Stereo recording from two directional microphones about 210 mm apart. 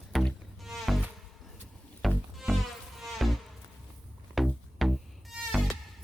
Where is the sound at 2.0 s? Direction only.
Centre (ahead or behind).